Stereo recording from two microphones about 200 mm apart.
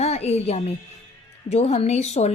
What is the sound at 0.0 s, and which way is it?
A woman's voice, 30° left (ahead or behind).